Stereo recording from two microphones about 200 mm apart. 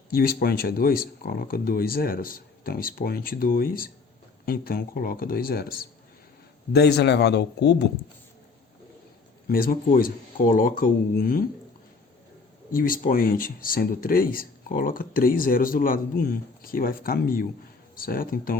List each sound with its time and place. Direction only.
0.1 s speech: 50° left (ahead or behind)
9.5 s speech: 45° left (ahead or behind)
12.7 s speech: 45° left (ahead or behind)